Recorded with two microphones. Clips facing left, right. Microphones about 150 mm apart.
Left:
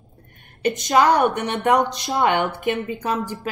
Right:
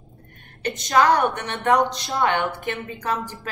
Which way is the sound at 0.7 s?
20° left (ahead or behind).